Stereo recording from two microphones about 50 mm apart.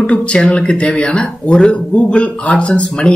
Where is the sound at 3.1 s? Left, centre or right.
Centre.